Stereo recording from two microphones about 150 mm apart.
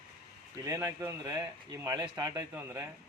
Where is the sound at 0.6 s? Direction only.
25° right (ahead or behind).